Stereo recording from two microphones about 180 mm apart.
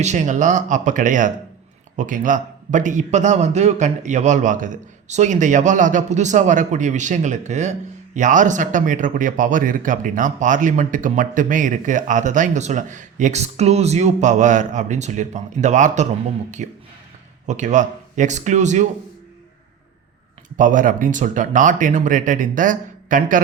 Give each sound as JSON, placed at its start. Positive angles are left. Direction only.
{"t": 0.0, "sound": "a man's voice", "side_deg": -40}
{"t": 20.6, "sound": "a man's voice", "side_deg": -45}